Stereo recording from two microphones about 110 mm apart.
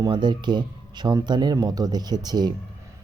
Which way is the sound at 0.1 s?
45° right (ahead or behind).